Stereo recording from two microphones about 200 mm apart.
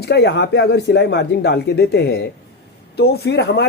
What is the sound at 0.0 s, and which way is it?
Speech, 55° left (ahead or behind).